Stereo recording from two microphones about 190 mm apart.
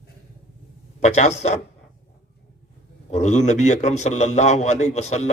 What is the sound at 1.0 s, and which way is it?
Speech, 40° left (ahead or behind).